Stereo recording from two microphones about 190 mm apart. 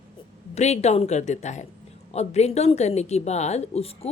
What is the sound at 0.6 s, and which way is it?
A woman's voice, 35° left (ahead or behind).